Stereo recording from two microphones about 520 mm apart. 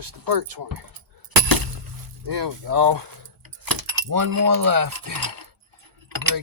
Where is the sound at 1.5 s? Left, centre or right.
Right.